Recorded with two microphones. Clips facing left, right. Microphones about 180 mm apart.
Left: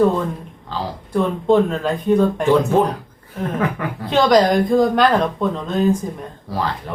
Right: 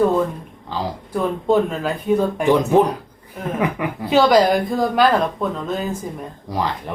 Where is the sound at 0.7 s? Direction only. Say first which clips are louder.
Left 1 dB; 5° right (ahead or behind).